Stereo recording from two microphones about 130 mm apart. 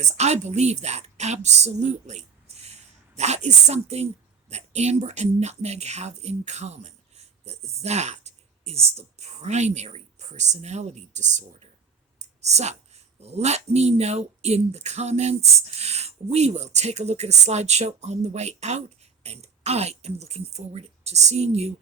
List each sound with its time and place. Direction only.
0.0 s a woman's voice: 60° right (ahead or behind)